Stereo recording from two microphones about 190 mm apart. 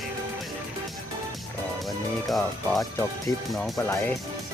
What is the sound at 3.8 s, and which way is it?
Speech, 10° left (ahead or behind).